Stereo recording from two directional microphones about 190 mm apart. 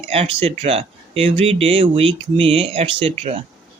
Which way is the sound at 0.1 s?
30° right (ahead or behind).